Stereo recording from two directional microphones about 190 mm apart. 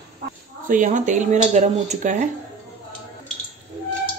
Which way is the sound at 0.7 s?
45° right (ahead or behind).